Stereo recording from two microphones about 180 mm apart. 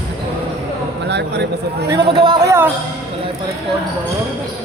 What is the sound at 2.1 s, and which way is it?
Speech, 25° right (ahead or behind).